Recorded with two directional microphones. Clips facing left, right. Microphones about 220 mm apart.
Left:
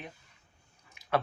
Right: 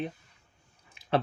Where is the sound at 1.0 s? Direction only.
30° right (ahead or behind).